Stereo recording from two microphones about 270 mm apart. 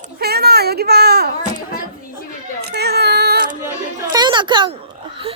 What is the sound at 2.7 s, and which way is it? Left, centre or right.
Baby cry, right.